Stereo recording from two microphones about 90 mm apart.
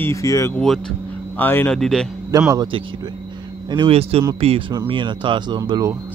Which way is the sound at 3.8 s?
90° right.